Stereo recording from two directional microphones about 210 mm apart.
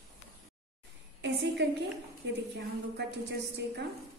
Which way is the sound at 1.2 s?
55° right (ahead or behind).